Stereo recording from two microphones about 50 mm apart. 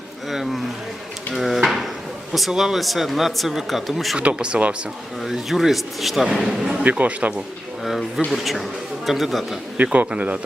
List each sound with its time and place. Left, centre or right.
0.3 s speech: centre
1.3 s drawer open or close: centre
2.5 s speech: centre
4.2 s speech: right
5.2 s a man's voice: centre
6.8 s speech: right
7.9 s speech: centre
9.7 s speech: right